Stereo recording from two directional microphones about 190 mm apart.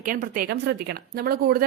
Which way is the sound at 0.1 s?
50° right (ahead or behind).